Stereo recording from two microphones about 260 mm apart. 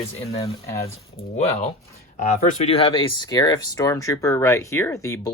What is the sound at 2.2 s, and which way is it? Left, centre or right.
Speech, left.